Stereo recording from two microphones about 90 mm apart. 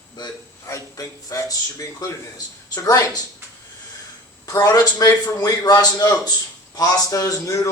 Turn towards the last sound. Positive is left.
turn(degrees=40)  # may be behind; listen again after turning